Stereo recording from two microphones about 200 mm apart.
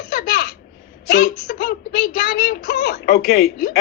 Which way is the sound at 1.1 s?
40° left (ahead or behind).